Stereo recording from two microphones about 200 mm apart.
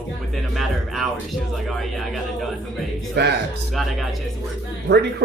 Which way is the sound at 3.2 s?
60° right (ahead or behind).